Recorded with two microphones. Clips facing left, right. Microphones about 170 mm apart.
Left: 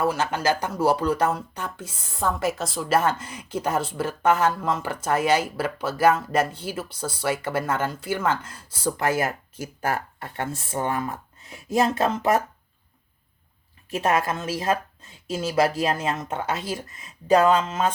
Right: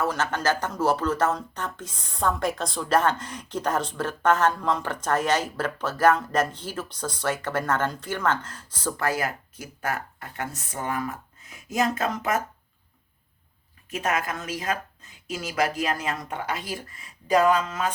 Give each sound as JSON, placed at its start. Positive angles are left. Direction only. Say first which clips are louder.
{"t": 0.0, "sound": "speech", "louder": "left 2 dB", "side_deg": 10}
{"t": 9.0, "sound": "speech", "louder": "left 2 dB", "side_deg": 25}
{"t": 13.9, "sound": "speech", "louder": "left 4 dB", "side_deg": 30}